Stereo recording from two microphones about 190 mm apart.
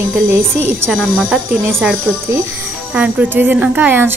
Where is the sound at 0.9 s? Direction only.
Centre (ahead or behind).